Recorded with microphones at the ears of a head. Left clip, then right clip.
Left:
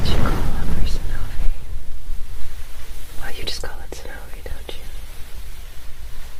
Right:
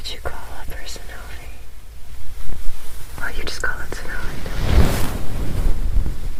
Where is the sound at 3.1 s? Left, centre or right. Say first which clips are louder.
Right 2 dB; right.